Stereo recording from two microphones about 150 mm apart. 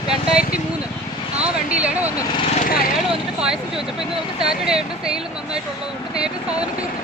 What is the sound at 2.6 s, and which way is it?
Speech, 70° left (ahead or behind).